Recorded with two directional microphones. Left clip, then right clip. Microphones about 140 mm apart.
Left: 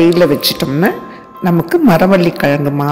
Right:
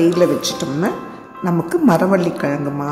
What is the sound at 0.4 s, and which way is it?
A woman's voice, 35° left (ahead or behind).